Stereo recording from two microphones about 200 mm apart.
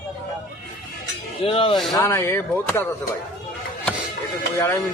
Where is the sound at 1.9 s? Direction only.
15° left (ahead or behind).